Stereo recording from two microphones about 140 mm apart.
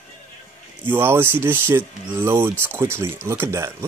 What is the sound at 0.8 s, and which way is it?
Speech, 15° right (ahead or behind).